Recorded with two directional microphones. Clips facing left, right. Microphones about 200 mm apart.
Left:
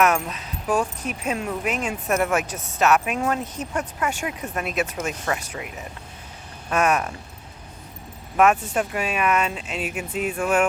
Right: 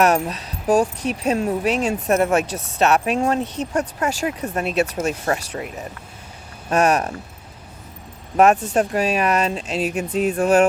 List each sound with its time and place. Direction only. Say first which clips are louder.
0.0 s speech: right 3 dB; 35° right (ahead or behind)
6.7 s speech: right 4 dB; 35° right (ahead or behind)
8.4 s speech: right 4 dB; 35° right (ahead or behind)